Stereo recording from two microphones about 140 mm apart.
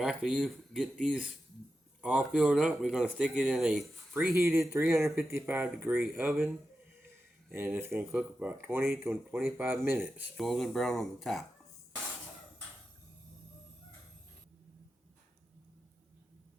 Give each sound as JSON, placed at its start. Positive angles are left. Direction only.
{"t": 0.0, "sound": "speech", "side_deg": -5}
{"t": 4.4, "sound": "speech", "side_deg": -20}
{"t": 7.5, "sound": "speech", "side_deg": -15}
{"t": 10.3, "sound": "speech", "side_deg": 0}